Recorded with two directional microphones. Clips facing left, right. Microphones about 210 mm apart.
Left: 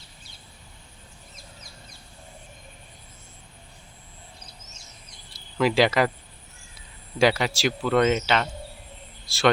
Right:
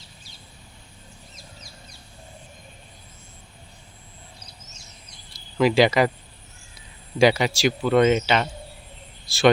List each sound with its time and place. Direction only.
5.5 s speech: centre (ahead or behind)
7.2 s speech: centre (ahead or behind)